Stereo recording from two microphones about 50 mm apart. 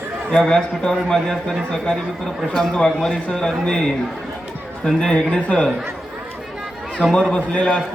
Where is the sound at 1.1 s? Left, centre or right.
Centre.